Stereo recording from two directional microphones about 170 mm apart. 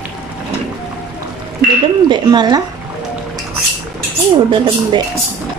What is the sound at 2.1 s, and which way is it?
Speech, 25° right (ahead or behind).